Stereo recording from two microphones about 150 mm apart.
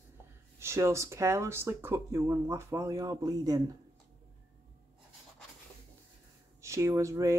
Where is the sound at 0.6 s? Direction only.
20° right (ahead or behind).